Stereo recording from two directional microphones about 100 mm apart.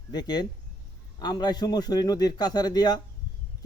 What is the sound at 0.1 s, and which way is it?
A man's voice, 45° left (ahead or behind).